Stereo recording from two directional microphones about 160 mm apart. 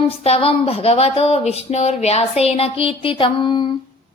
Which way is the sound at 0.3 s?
40° left (ahead or behind).